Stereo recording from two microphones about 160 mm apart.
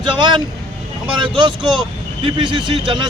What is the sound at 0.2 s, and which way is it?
Speech, 30° right (ahead or behind).